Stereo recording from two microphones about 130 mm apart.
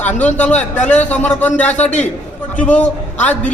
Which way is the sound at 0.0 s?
10° left (ahead or behind).